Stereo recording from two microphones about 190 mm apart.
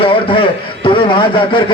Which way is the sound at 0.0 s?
25° left (ahead or behind).